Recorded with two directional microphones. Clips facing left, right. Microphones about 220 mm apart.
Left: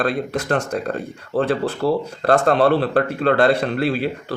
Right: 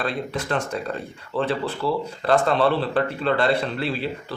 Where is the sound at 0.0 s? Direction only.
45° left (ahead or behind).